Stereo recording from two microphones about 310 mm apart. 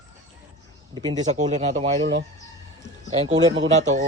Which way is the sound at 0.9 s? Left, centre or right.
Centre.